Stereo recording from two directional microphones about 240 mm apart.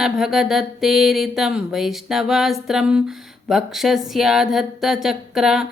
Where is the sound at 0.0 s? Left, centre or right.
Centre.